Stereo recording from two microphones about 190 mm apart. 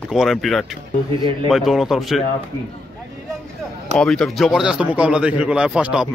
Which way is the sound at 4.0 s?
Centre (ahead or behind).